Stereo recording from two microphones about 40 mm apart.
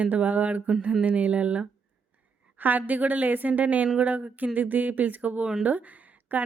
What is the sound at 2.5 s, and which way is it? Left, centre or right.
A woman's voice, right.